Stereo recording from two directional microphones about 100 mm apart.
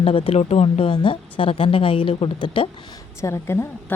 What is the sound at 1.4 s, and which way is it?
Speech, 60° left (ahead or behind).